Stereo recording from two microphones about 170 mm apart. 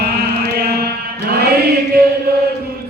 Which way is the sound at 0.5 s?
65° right (ahead or behind).